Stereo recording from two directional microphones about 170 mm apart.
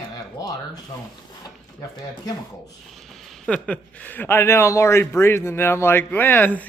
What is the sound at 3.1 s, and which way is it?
Speech, centre (ahead or behind).